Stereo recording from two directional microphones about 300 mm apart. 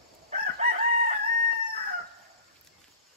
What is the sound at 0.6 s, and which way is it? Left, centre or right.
Chicken, right.